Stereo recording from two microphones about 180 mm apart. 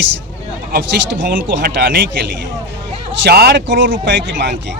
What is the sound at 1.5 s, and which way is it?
Speech, 75° right (ahead or behind).